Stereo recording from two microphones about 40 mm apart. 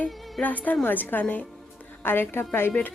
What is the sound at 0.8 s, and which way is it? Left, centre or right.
Speech, left.